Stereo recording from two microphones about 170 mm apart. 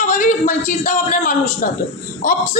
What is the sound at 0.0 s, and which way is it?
A man's voice, 50° left (ahead or behind).